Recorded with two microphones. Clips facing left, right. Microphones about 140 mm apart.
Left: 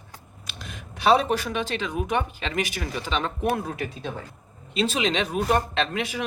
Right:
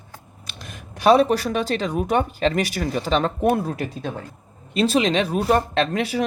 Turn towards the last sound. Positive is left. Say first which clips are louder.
# right 5 dB
turn(degrees=-40)  # may be behind; listen again after turning